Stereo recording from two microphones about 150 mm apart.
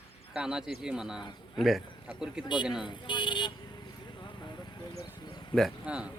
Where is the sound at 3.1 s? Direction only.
30° left (ahead or behind).